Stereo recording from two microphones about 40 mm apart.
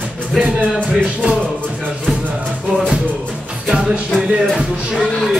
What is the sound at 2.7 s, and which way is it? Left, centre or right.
Music, centre.